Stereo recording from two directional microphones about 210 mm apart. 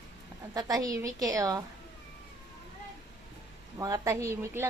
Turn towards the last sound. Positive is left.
turn(degrees=-10)  # may be behind; listen again after turning